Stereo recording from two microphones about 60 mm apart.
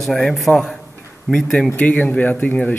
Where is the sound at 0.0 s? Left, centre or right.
Centre.